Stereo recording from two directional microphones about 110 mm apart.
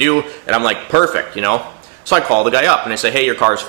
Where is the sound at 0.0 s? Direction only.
20° right (ahead or behind).